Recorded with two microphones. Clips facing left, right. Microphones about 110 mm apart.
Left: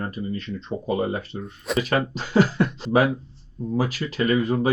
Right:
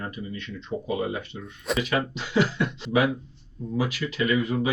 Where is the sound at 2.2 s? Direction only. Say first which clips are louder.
Left 6 dB; 40° left (ahead or behind).